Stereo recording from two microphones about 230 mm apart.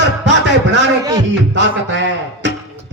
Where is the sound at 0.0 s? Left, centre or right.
Right.